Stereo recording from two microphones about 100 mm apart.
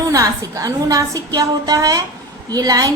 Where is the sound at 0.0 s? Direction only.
35° right (ahead or behind).